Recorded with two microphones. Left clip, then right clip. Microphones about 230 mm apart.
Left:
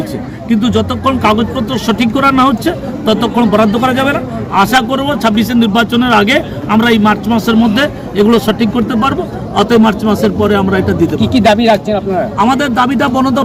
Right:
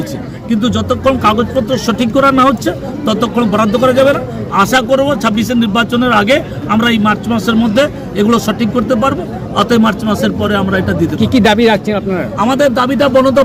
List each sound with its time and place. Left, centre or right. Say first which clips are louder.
0.4 s a man's voice: left 1 dB; centre
11.2 s a man's voice: right 2 dB; right
12.4 s speech: right 1 dB; centre